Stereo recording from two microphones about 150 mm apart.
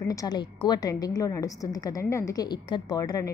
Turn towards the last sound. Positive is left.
turn(degrees=25)  # may be behind; listen again after turning